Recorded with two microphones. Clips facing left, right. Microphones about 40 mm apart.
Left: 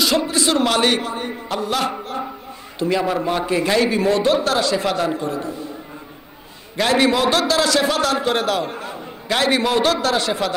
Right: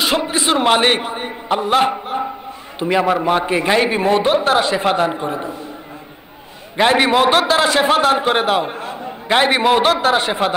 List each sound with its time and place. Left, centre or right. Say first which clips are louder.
0.0 s a sound: right 1 dB; right
2.8 s a man's voice: right 3 dB; right
6.8 s a man's voice: right 3 dB; right